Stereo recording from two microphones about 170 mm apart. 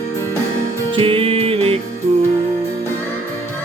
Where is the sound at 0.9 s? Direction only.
30° right (ahead or behind).